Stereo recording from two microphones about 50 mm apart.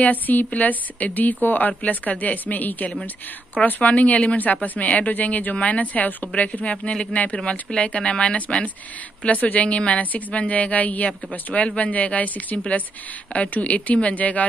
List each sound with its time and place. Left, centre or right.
0.0 s a woman's voice: left